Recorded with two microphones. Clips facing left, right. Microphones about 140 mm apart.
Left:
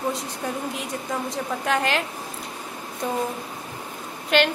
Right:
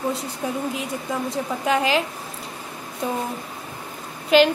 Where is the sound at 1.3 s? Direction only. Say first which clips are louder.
Right 3 dB; 5° right (ahead or behind).